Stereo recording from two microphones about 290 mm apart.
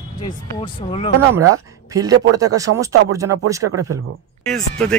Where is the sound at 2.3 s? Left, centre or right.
Centre.